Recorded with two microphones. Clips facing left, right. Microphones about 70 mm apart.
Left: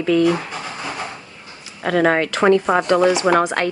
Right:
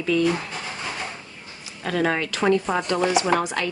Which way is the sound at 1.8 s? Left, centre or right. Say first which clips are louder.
Left 7 dB; left.